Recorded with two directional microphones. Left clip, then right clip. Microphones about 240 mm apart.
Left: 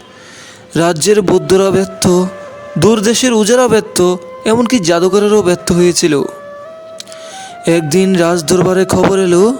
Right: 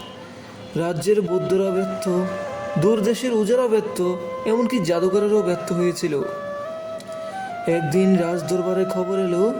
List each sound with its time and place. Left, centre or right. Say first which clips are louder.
0.7 s speech: left 10 dB; left
7.6 s speech: left 9 dB; left